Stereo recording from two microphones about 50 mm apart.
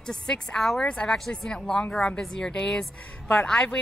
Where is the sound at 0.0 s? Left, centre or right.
Centre.